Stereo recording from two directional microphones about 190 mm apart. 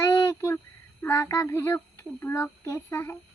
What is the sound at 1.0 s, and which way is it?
A child's voice, 10° left (ahead or behind).